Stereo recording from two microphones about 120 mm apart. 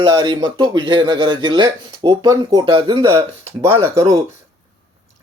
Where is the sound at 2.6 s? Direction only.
45° right (ahead or behind).